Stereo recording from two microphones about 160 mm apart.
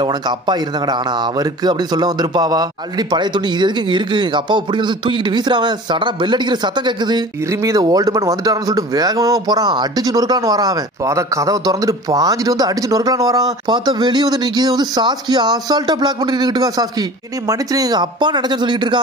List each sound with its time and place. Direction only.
0.0 s speech: 25° right (ahead or behind)